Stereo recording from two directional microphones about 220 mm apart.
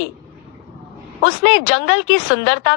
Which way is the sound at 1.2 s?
65° left (ahead or behind).